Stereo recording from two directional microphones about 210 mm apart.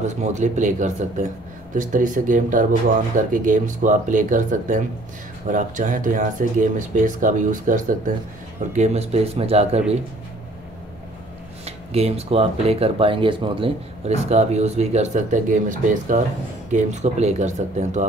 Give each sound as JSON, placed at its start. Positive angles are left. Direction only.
{"t": 0.0, "sound": "a man's voice", "side_deg": -35}
{"t": 11.6, "sound": "a man's voice", "side_deg": -30}